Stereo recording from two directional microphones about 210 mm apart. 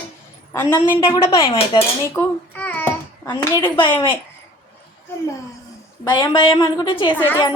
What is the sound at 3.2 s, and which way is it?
Speech, 20° left (ahead or behind).